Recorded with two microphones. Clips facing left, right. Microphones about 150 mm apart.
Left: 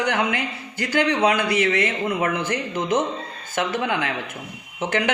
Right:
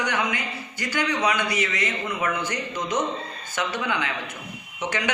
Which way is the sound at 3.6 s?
50° left (ahead or behind).